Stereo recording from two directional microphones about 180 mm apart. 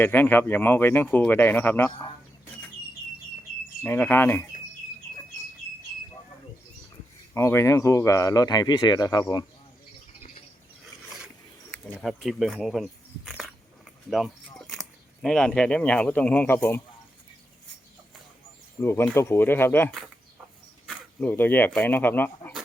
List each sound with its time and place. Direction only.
0.0 s speech: 10° left (ahead or behind)
3.8 s speech: 10° left (ahead or behind)
7.3 s speech: 15° left (ahead or behind)
11.7 s speech: 5° left (ahead or behind)
14.7 s speech: centre (ahead or behind)
18.8 s speech: 15° left (ahead or behind)
20.8 s a sound: 10° left (ahead or behind)
21.8 s speech: 10° left (ahead or behind)